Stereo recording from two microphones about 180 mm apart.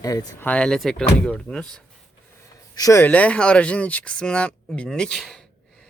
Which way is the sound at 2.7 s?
20° left (ahead or behind).